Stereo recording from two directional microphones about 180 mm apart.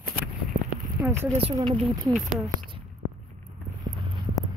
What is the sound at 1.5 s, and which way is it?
Speech, 25° right (ahead or behind).